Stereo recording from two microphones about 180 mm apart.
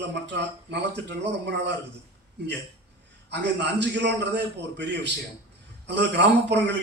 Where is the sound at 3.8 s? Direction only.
75° right (ahead or behind).